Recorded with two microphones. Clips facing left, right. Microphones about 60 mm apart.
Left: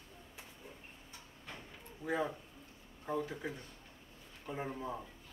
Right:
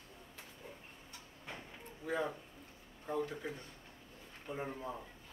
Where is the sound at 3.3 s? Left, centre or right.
Centre.